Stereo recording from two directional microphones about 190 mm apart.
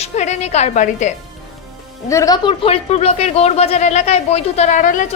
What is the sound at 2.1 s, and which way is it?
A woman's voice, 20° left (ahead or behind).